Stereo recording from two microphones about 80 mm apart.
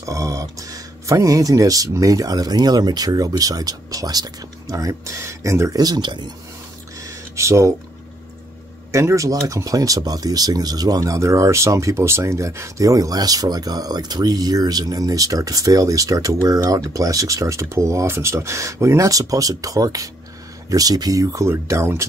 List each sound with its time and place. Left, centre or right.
0.0 s speech: right
5.8 s speech: right
7.0 s a sound: right
8.9 s speech: right